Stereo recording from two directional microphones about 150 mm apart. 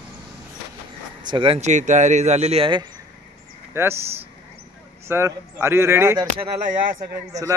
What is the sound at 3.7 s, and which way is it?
Speech, 15° right (ahead or behind).